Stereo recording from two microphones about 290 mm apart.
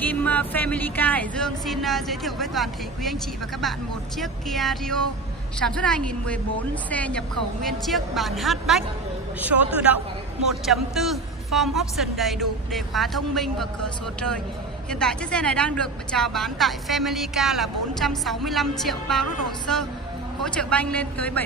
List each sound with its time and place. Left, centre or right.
0.0 s a woman's voice: centre
4.2 s a woman's voice: centre
14.9 s a woman's voice: centre